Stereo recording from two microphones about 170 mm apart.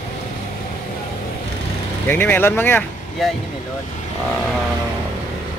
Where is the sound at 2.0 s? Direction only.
10° left (ahead or behind).